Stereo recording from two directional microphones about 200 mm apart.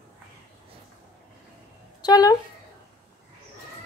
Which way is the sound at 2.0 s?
20° left (ahead or behind).